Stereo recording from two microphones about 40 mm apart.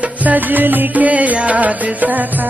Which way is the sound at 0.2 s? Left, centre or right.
Right.